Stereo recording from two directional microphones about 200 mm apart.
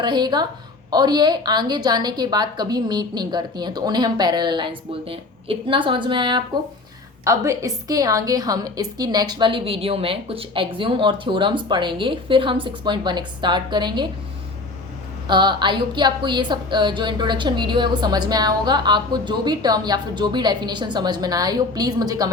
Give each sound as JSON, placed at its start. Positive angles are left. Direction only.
{"t": 0.0, "sound": "a woman's voice", "side_deg": -20}
{"t": 15.3, "sound": "a woman's voice", "side_deg": -25}